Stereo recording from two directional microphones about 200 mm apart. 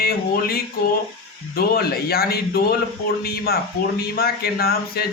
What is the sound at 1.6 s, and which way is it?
Speech, 50° left (ahead or behind).